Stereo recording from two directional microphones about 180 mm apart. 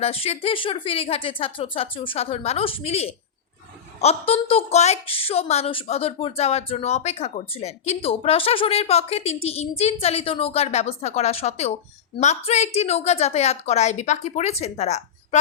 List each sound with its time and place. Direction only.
0.0 s a woman's voice: 35° left (ahead or behind)